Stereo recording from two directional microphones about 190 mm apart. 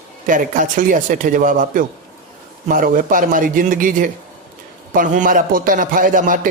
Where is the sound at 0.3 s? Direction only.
45° right (ahead or behind).